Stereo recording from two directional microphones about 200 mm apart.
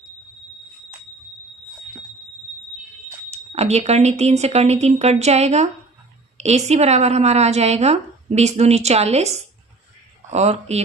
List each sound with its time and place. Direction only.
3.2 s a woman's voice: 30° right (ahead or behind)